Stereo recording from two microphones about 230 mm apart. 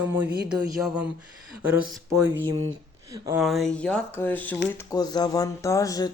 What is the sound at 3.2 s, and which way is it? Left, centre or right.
Speech, centre.